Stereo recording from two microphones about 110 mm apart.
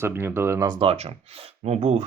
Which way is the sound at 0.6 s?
45° right (ahead or behind).